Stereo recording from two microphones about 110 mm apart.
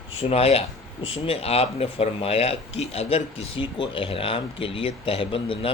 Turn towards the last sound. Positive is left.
turn(degrees=55)  # may be behind; listen again after turning